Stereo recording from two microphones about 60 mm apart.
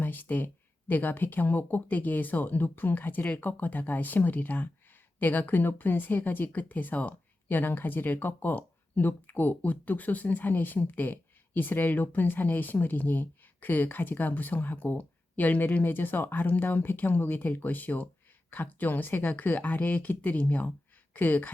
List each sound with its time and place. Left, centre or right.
0.0 s speech: left